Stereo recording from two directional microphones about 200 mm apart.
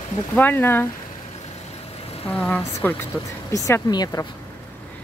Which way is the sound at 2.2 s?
5° left (ahead or behind).